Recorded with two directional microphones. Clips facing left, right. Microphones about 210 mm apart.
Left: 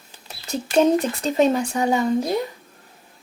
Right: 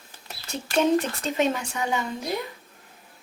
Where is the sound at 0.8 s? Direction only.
35° left (ahead or behind).